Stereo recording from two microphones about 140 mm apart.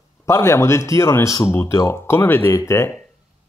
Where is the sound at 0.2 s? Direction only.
20° left (ahead or behind).